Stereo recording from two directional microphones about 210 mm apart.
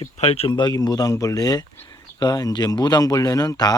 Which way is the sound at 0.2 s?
30° left (ahead or behind).